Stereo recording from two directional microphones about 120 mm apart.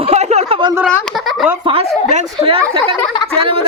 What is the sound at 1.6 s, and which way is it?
Speech, 50° right (ahead or behind).